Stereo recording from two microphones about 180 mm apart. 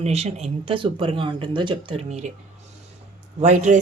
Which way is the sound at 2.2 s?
40° right (ahead or behind).